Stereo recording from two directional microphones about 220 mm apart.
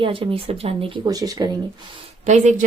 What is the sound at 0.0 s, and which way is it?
Speech, 25° right (ahead or behind).